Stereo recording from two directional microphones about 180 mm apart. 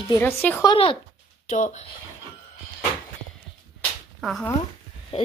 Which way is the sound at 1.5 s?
40° left (ahead or behind).